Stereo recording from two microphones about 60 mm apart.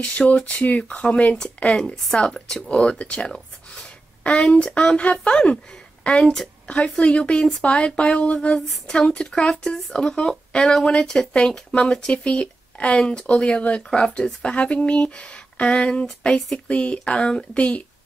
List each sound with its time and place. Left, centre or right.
0.0 s speech: left
2.0 s speech: centre
6.2 s a woman's voice: centre
6.7 s speech: centre